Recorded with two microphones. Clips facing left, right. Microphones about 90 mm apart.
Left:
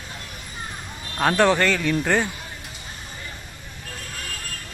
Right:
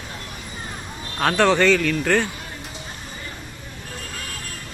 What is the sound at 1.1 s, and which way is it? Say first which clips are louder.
Speech: right 1 dB; 10° left (ahead or behind).